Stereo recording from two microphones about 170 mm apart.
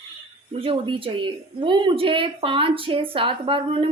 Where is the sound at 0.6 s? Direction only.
30° right (ahead or behind).